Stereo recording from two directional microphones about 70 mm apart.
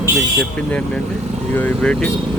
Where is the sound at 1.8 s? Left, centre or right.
Centre.